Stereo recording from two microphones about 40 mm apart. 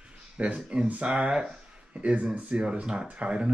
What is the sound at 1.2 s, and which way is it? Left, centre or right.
Speech, right.